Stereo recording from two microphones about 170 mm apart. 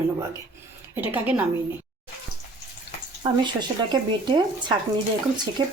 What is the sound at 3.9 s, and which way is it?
Speech, 25° right (ahead or behind).